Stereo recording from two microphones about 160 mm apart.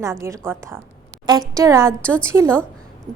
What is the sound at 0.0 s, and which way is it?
A woman's voice, 20° right (ahead or behind).